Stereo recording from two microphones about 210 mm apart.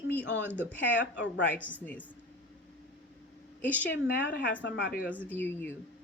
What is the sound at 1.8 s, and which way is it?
Speech, 5° left (ahead or behind).